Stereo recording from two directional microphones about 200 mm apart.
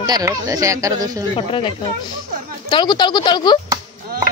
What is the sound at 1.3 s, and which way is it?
Speech, 25° left (ahead or behind).